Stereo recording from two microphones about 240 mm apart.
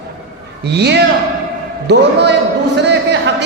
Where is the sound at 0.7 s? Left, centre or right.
Right.